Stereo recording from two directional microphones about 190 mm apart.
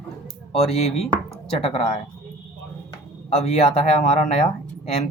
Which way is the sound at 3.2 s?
35° left (ahead or behind).